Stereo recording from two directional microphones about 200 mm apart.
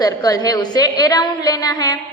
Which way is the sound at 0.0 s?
20° left (ahead or behind).